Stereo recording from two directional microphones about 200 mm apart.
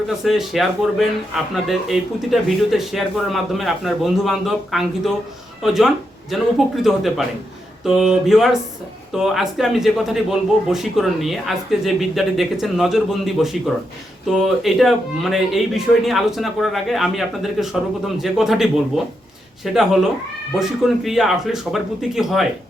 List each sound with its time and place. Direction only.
0.3 s a man's voice: centre (ahead or behind)